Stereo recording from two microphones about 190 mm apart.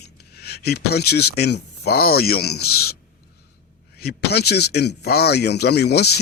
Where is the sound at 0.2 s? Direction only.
60° left (ahead or behind).